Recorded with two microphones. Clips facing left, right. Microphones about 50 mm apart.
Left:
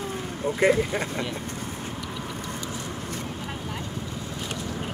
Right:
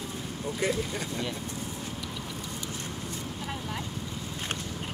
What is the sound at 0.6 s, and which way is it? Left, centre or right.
Speech, left.